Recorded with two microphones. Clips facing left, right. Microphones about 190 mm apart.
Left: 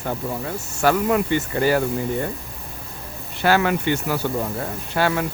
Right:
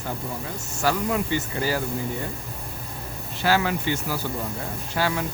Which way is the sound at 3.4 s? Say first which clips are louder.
Left 4 dB; 60° left (ahead or behind).